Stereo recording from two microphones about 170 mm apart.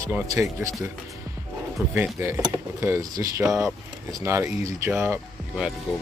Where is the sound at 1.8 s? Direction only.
15° right (ahead or behind).